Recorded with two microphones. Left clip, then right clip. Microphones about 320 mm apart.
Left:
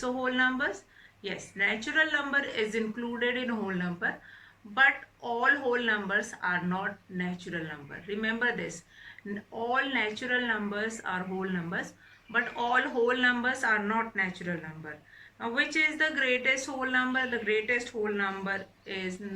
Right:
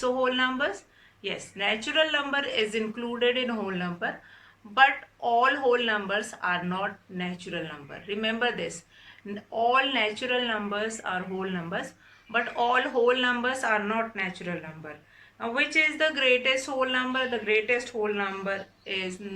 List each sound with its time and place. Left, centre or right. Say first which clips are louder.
0.0 s speech: right 3 dB; centre